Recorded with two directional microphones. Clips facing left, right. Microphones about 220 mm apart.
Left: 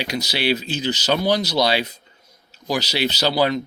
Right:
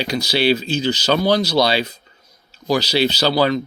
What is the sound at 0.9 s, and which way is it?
Speech, 20° left (ahead or behind).